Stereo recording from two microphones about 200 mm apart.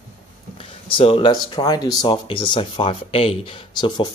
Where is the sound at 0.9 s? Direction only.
25° left (ahead or behind).